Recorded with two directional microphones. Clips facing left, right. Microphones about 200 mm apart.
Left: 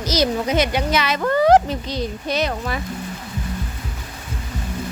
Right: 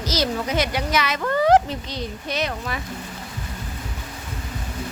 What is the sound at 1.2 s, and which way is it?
Speech, 40° left (ahead or behind).